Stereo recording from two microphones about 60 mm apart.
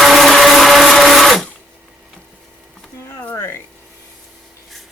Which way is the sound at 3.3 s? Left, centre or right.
Left.